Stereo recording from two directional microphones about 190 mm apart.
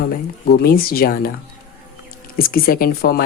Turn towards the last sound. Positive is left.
turn(degrees=50)  # may be behind; listen again after turning